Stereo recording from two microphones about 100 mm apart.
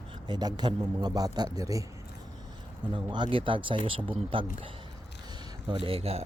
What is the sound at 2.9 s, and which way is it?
Speech, 50° right (ahead or behind).